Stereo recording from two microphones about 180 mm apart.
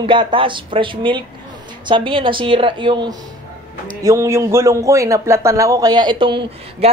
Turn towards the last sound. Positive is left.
turn(degrees=-30)  # may be behind; listen again after turning